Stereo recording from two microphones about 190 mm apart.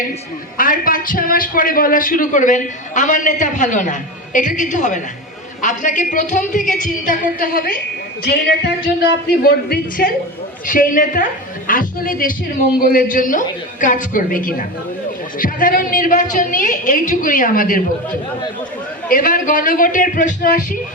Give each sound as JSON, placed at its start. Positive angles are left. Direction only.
{"t": 0.5, "sound": "a man's voice", "side_deg": 45}
{"t": 19.0, "sound": "a man's voice", "side_deg": 45}